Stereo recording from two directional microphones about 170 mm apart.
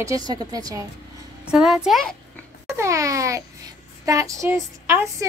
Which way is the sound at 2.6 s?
15° right (ahead or behind).